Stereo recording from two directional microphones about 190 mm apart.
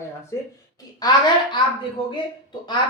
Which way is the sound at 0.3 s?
15° left (ahead or behind).